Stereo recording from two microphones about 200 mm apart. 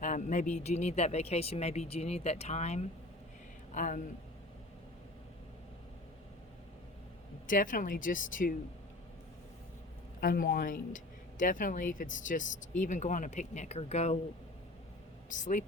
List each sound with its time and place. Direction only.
0.0 s speech: 35° left (ahead or behind)
7.4 s speech: 40° left (ahead or behind)
10.2 s speech: 45° left (ahead or behind)
15.3 s speech: 40° left (ahead or behind)